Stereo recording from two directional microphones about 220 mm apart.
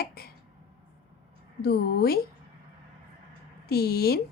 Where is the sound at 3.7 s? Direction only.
45° left (ahead or behind).